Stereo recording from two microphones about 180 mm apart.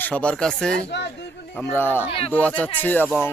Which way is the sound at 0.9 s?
70° left (ahead or behind).